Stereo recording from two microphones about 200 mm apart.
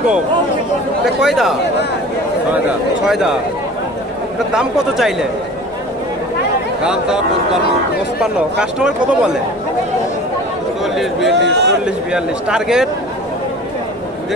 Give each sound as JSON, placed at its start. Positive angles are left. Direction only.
{"t": 1.0, "sound": "speech", "side_deg": 0}
{"t": 4.6, "sound": "speech", "side_deg": 0}
{"t": 6.8, "sound": "speech", "side_deg": -5}
{"t": 8.2, "sound": "speech", "side_deg": -5}
{"t": 11.0, "sound": "speech", "side_deg": 0}
{"t": 11.3, "sound": "a man's voice", "side_deg": -60}
{"t": 11.8, "sound": "speech", "side_deg": -5}